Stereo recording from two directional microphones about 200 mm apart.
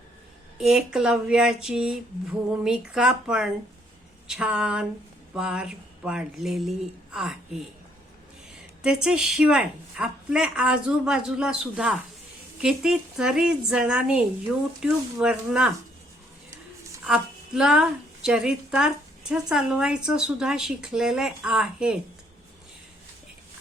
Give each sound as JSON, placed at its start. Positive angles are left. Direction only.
{"t": 0.6, "sound": "a woman's voice", "side_deg": -5}
{"t": 8.8, "sound": "a woman's voice", "side_deg": -5}
{"t": 17.1, "sound": "a woman's voice", "side_deg": -5}